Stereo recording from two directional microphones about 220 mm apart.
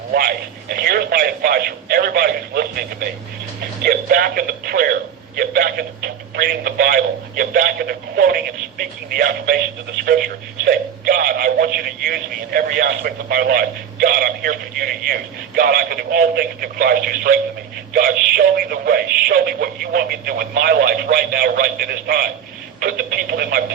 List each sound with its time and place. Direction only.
0.1 s speech: 45° right (ahead or behind)